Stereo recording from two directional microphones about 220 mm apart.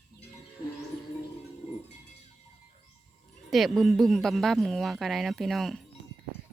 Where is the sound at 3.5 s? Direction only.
Centre (ahead or behind).